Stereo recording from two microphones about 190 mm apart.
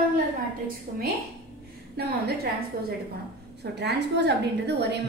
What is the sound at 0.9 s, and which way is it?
Speech, 45° right (ahead or behind).